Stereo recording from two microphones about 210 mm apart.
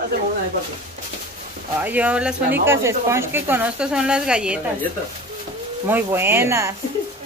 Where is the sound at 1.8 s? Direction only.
5° right (ahead or behind).